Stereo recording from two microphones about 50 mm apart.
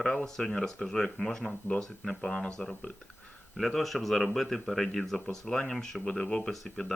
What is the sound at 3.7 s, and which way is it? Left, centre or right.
Speech, centre.